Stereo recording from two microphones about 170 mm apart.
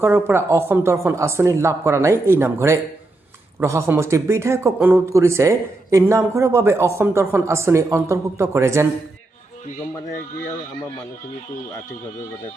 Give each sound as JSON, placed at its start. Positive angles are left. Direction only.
{"t": 0.0, "sound": "speech", "side_deg": -15}